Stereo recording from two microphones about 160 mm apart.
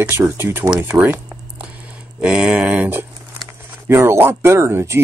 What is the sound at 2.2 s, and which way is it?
Speech, 5° right (ahead or behind).